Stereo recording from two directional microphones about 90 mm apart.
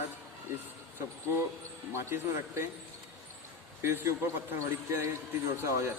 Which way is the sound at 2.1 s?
25° right (ahead or behind).